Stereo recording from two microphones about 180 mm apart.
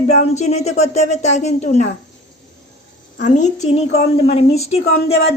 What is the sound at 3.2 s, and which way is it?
Speech, 40° left (ahead or behind).